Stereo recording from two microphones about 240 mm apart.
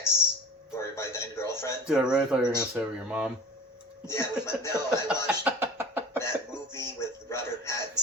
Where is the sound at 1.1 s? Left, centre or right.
Centre.